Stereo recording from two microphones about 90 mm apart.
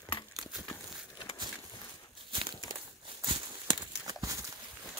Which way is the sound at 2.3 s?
70° right (ahead or behind).